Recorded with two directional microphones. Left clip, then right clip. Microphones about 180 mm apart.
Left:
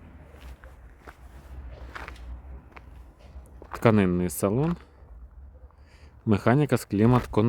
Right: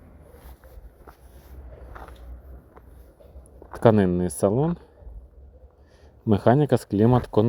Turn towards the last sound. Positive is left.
turn(degrees=-5)  # may be behind; listen again after turning